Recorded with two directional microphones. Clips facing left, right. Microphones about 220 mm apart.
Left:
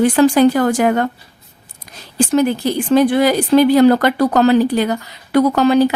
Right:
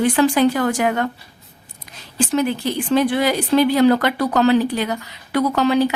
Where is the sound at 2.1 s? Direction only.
40° left (ahead or behind).